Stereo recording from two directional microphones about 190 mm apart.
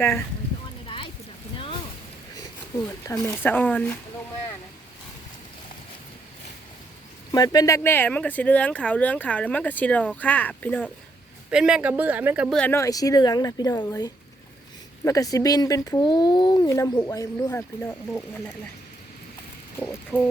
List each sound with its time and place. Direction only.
0.9 s a sound: 25° left (ahead or behind)
3.0 s speech: 15° left (ahead or behind)
7.3 s speech: 20° left (ahead or behind)
11.5 s speech: 5° right (ahead or behind)
12.5 s speech: 10° left (ahead or behind)
19.9 s speech: 10° left (ahead or behind)